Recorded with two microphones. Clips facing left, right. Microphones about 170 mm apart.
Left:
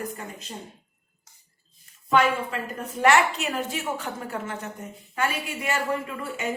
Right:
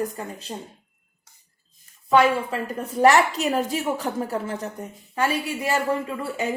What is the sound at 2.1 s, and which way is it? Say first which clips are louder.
A woman's voice: right 4 dB; 35° right (ahead or behind).